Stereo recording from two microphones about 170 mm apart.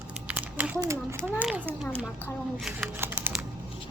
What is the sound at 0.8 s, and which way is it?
A child's voice, 15° right (ahead or behind).